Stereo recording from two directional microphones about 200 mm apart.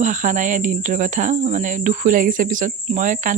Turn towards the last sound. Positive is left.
turn(degrees=-40)  # may be behind; listen again after turning